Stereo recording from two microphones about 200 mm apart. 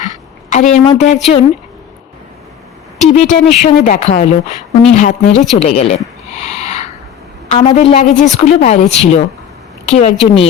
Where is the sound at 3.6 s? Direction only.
35° left (ahead or behind).